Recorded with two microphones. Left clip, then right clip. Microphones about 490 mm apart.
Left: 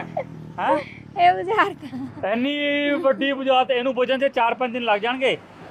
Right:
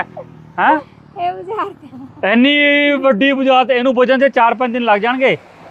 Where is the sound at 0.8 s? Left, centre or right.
Centre.